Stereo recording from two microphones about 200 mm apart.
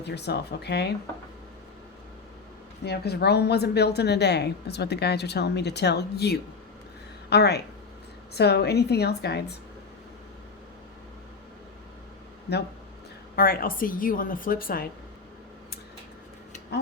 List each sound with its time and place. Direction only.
0.0 s a woman's voice: 55° left (ahead or behind)
2.8 s a woman's voice: 55° left (ahead or behind)
13.3 s a woman's voice: 45° left (ahead or behind)